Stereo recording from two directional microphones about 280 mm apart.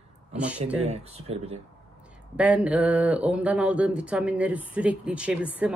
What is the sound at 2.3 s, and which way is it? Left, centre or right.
Speech, centre.